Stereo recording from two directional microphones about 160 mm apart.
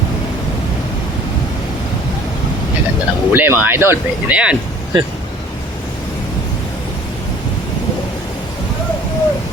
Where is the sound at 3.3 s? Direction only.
10° right (ahead or behind).